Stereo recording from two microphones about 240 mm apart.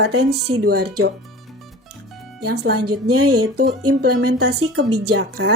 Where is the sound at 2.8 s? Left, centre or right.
Right.